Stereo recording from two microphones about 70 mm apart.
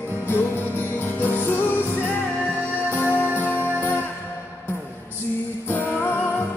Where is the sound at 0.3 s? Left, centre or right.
Left.